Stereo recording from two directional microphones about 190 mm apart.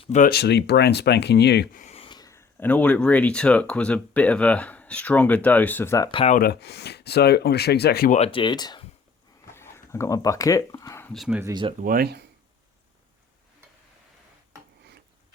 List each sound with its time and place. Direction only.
0.0 s speech: 40° left (ahead or behind)
0.3 s speech: 60° left (ahead or behind)
1.7 s speech: 40° left (ahead or behind); by 6.2 s 20° left (ahead or behind)
6.2 s speech: 50° left (ahead or behind)
8.1 s speech: 30° left (ahead or behind)
9.5 s a sound: 15° left (ahead or behind)
11.1 s speech: centre (ahead or behind)
11.8 s speech: 50° right (ahead or behind)